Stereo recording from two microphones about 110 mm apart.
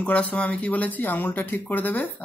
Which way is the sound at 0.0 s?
10° left (ahead or behind).